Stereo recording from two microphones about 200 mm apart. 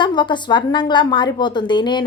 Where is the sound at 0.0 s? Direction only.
25° left (ahead or behind).